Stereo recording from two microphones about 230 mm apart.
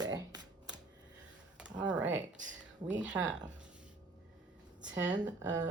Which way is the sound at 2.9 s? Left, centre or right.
Centre.